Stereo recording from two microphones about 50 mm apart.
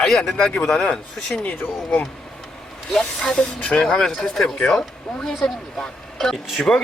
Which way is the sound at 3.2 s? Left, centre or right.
Centre.